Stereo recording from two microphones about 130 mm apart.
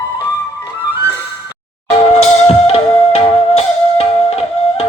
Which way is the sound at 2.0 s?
55° left (ahead or behind).